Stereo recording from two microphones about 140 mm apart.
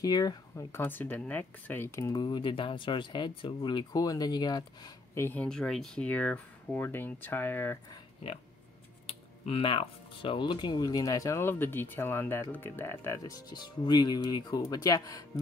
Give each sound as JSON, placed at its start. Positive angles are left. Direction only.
{"t": 0.0, "sound": "speech", "side_deg": 25}
{"t": 2.2, "sound": "speech", "side_deg": 35}
{"t": 5.1, "sound": "speech", "side_deg": 15}
{"t": 9.0, "sound": "speech", "side_deg": 40}